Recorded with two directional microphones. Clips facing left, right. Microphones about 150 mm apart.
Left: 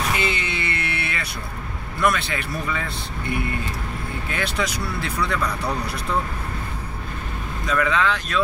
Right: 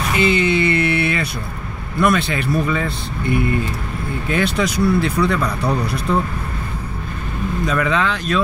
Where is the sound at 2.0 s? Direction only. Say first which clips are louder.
Right 4 dB; 25° right (ahead or behind).